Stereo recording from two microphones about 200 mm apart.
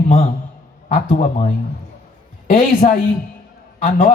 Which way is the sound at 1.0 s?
40° left (ahead or behind).